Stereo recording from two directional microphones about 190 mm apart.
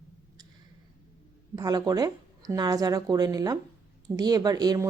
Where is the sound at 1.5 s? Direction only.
20° right (ahead or behind).